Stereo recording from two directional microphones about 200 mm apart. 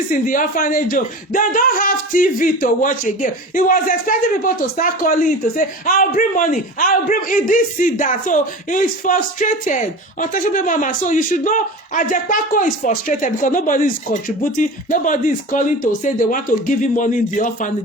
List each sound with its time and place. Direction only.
0.1 s speech: 40° left (ahead or behind)